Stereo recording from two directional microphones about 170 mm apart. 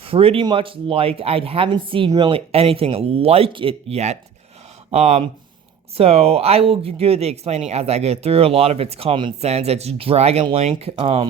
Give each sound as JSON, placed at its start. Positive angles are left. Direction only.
{"t": 0.0, "sound": "speech", "side_deg": -35}